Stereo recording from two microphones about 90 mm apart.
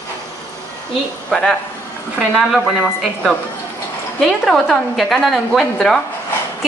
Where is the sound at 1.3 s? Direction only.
5° left (ahead or behind).